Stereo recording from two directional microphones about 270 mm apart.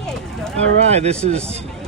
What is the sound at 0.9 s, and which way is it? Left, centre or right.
Speech, right.